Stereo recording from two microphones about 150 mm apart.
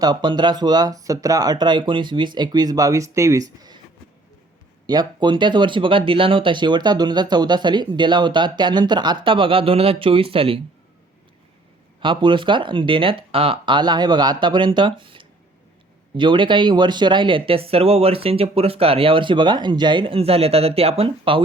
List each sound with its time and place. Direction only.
0.0 s speech: 30° right (ahead or behind)
4.9 s speech: 30° right (ahead or behind)
11.9 s speech: 35° right (ahead or behind)